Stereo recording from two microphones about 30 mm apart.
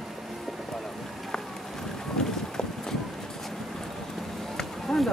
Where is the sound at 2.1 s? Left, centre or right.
Left.